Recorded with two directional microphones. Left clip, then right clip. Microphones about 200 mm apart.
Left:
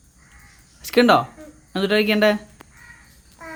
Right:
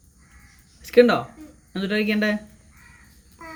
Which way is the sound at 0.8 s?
35° left (ahead or behind).